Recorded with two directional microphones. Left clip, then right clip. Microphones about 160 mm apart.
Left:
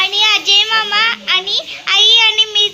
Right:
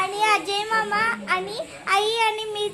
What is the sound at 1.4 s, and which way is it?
Child singing, centre (ahead or behind).